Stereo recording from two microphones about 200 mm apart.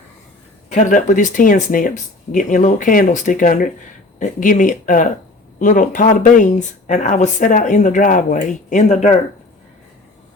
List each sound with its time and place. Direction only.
0.7 s speech: 40° left (ahead or behind)